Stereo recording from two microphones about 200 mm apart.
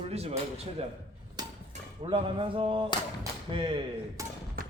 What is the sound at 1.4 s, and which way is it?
Hammer, 20° right (ahead or behind).